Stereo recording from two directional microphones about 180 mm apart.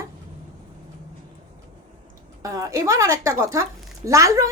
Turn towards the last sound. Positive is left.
turn(degrees=-15)  # may be behind; listen again after turning